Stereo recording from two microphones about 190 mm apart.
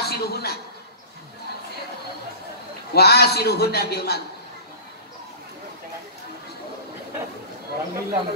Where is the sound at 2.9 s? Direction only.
55° left (ahead or behind).